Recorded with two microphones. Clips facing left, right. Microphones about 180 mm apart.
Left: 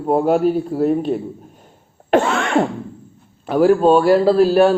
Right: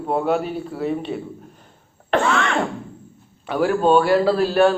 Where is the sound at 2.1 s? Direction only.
40° left (ahead or behind).